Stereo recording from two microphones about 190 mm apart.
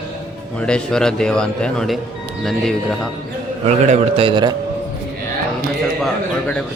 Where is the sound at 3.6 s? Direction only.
35° right (ahead or behind).